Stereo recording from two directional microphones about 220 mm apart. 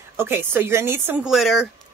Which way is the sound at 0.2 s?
10° right (ahead or behind).